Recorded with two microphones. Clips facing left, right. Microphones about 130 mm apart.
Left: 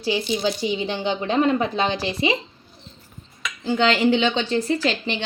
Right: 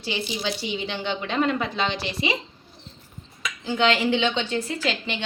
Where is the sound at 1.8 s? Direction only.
40° left (ahead or behind).